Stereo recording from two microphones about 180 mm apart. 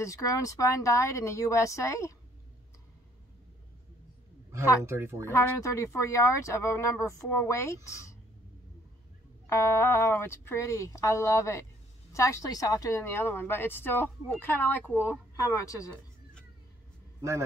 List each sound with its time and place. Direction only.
0.0 s speech: 15° left (ahead or behind)
4.8 s speech: 15° right (ahead or behind)
5.2 s speech: 15° left (ahead or behind)
9.5 s speech: 15° left (ahead or behind)